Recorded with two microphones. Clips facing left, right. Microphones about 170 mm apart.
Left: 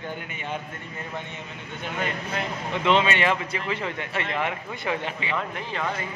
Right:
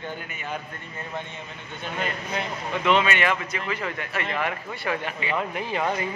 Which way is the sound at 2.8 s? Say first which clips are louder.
Even; 25° left (ahead or behind).